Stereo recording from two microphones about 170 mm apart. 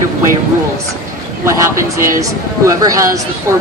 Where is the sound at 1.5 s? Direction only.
15° right (ahead or behind).